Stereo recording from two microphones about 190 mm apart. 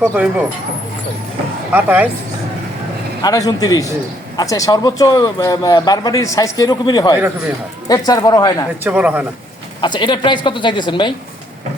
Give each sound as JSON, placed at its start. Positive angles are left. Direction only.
{"t": 0.0, "sound": "speech", "side_deg": -5}
{"t": 1.7, "sound": "speech", "side_deg": -10}
{"t": 3.2, "sound": "a man's voice", "side_deg": 20}
{"t": 8.8, "sound": "speech", "side_deg": -5}
{"t": 9.8, "sound": "a man's voice", "side_deg": 25}